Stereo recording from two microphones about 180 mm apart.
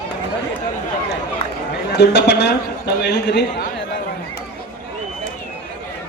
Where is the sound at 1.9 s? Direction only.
65° left (ahead or behind).